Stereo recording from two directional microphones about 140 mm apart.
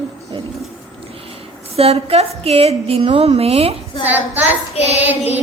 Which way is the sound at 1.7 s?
45° right (ahead or behind).